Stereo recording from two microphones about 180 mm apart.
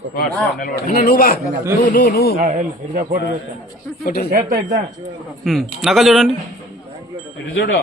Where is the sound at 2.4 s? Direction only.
45° right (ahead or behind).